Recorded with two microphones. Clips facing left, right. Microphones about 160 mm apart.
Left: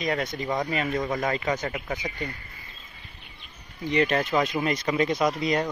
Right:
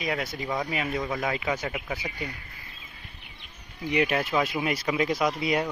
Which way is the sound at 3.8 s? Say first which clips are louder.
Left 2 dB; 10° right (ahead or behind).